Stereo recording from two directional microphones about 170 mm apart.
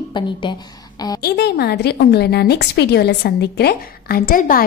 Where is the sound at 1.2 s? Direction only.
75° left (ahead or behind).